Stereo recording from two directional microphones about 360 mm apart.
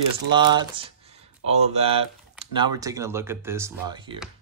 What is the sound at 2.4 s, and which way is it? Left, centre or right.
Speech, centre.